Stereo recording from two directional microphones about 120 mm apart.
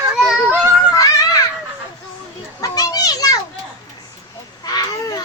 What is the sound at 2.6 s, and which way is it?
Children playing, 30° left (ahead or behind).